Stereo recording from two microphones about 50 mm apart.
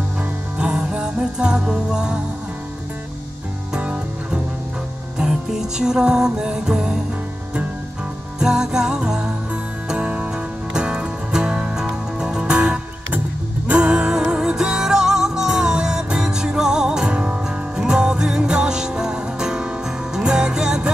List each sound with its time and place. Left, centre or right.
0.2 s music: centre
3.7 s music: right
5.1 s music: centre
8.4 s music: centre